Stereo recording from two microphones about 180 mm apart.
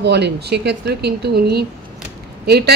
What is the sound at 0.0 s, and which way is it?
Speech, 65° right (ahead or behind).